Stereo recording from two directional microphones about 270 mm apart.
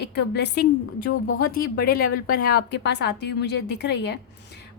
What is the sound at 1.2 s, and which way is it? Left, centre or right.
Speech, left.